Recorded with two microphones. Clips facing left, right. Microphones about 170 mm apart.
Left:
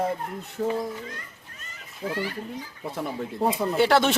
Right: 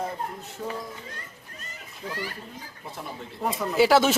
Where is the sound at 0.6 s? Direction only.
50° left (ahead or behind).